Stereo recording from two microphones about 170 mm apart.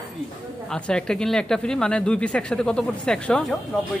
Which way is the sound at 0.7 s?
5° left (ahead or behind).